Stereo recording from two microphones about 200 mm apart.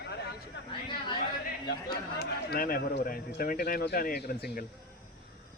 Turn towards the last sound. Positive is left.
turn(degrees=50)  # may be behind; listen again after turning